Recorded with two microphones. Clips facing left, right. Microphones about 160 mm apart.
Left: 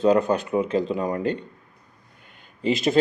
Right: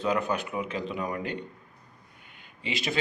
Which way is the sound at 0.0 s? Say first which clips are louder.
Left 9 dB; 40° left (ahead or behind).